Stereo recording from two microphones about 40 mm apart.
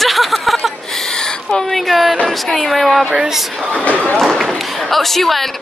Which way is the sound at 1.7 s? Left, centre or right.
Centre.